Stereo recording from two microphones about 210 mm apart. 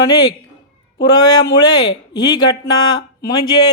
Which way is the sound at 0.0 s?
20° left (ahead or behind).